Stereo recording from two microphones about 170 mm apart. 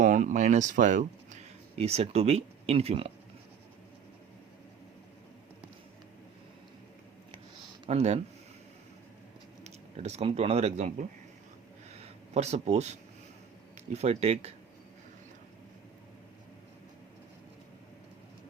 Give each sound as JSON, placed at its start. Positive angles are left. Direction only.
{"t": 0.0, "sound": "speech", "side_deg": -45}
{"t": 7.9, "sound": "speech", "side_deg": -35}
{"t": 9.6, "sound": "speech", "side_deg": -40}